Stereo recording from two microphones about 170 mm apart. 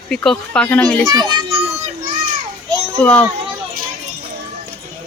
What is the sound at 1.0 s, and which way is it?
Speech, 25° right (ahead or behind).